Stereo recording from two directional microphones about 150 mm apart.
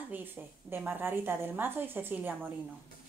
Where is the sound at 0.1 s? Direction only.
15° right (ahead or behind).